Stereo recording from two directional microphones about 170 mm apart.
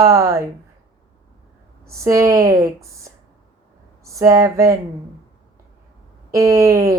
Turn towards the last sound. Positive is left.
turn(degrees=-15)  # may be behind; listen again after turning